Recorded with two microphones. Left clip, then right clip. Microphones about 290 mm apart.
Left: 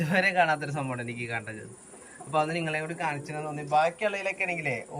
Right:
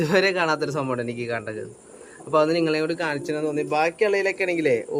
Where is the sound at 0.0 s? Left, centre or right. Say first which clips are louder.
Right 4 dB; centre.